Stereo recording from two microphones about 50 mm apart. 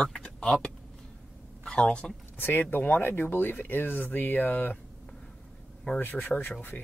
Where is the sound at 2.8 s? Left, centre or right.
Left.